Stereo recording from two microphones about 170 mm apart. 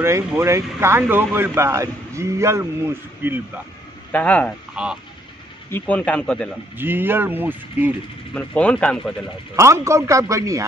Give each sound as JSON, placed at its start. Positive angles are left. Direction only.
{"t": 0.0, "sound": "speech", "side_deg": -15}
{"t": 4.1, "sound": "speech", "side_deg": 10}
{"t": 4.8, "sound": "speech", "side_deg": -5}
{"t": 5.7, "sound": "speech", "side_deg": 10}
{"t": 6.8, "sound": "speech", "side_deg": -10}
{"t": 8.4, "sound": "speech", "side_deg": 5}
{"t": 9.6, "sound": "speech", "side_deg": -15}